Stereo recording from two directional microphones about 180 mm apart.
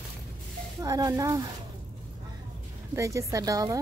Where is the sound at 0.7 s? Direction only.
20° right (ahead or behind).